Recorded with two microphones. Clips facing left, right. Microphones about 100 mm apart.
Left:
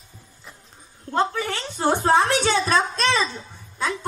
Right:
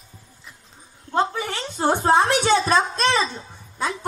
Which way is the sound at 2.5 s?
30° right (ahead or behind).